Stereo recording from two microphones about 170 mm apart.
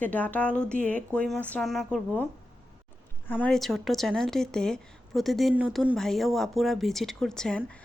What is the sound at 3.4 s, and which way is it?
A woman's voice, centre (ahead or behind).